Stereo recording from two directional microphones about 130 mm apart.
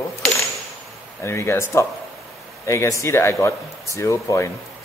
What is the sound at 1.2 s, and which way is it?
Speech, 20° left (ahead or behind).